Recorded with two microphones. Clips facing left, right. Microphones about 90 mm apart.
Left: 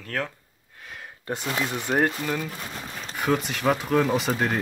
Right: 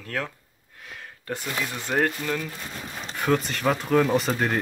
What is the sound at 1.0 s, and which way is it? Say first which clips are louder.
Speech: left 2 dB; 20° left (ahead or behind).